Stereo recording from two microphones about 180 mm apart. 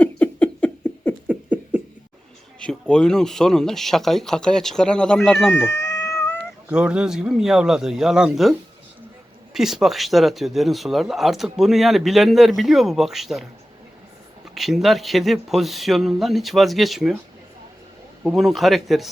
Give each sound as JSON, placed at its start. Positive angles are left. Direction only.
{"t": 0.0, "sound": "a sound", "side_deg": 10}
{"t": 1.3, "sound": "a sound", "side_deg": -10}
{"t": 2.6, "sound": "speech", "side_deg": 5}
{"t": 5.5, "sound": "cat", "side_deg": 15}
{"t": 6.7, "sound": "speech", "side_deg": -5}
{"t": 14.4, "sound": "speech", "side_deg": 0}
{"t": 18.2, "sound": "speech", "side_deg": 0}